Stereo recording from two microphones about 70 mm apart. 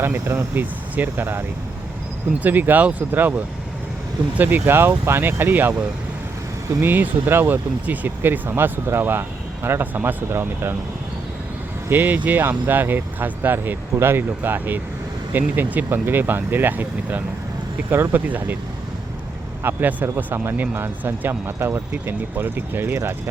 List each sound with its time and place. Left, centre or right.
0.0 s speech: right
6.8 s speech: right
11.9 s speech: right
19.6 s speech: right
20.4 s speech: right
23.0 s speech: right